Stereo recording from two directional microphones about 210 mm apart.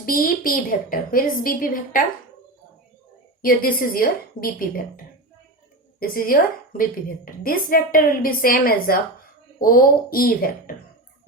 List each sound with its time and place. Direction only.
0.0 s a woman's voice: 40° left (ahead or behind)
3.4 s a woman's voice: 45° left (ahead or behind)
6.0 s a woman's voice: 45° left (ahead or behind)